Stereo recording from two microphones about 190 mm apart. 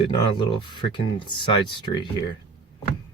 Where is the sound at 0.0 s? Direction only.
25° left (ahead or behind).